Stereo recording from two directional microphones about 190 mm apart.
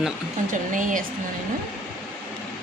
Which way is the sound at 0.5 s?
45° right (ahead or behind).